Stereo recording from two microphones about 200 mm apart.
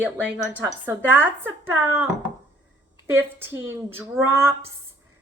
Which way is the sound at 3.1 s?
10° right (ahead or behind).